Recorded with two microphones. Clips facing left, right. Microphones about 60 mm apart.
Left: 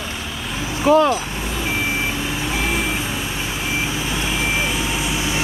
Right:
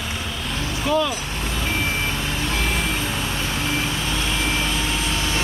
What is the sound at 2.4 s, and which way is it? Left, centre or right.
Reversing beeps, centre.